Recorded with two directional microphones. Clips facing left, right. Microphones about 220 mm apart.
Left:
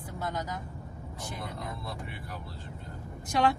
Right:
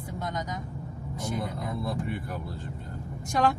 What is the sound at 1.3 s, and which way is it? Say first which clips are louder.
Speech: right 7 dB; 50° right (ahead or behind).